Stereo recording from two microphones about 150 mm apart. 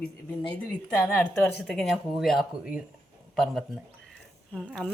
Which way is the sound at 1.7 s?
Centre (ahead or behind).